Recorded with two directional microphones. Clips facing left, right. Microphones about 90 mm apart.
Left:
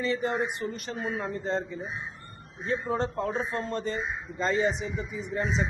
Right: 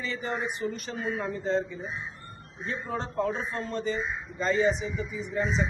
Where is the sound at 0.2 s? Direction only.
40° left (ahead or behind).